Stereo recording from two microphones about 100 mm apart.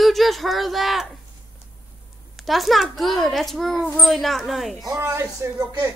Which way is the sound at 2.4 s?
Centre (ahead or behind).